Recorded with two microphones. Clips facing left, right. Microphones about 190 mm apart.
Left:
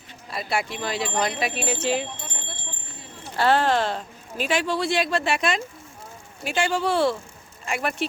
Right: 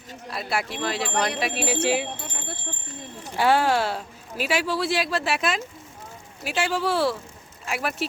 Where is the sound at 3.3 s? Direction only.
10° right (ahead or behind).